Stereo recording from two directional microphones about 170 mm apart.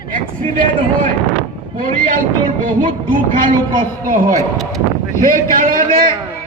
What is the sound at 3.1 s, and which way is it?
Speech, 50° right (ahead or behind).